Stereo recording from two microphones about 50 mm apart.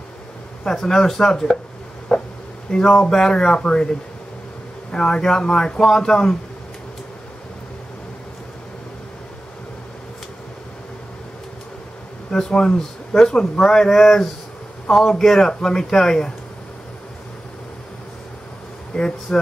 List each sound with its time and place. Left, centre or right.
0.7 s a man's voice: centre
2.1 s a sound: centre
2.7 s a man's voice: centre
4.9 s a man's voice: centre
12.3 s a man's voice: centre
18.9 s speech: left